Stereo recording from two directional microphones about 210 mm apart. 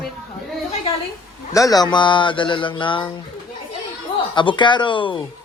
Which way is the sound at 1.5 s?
15° left (ahead or behind).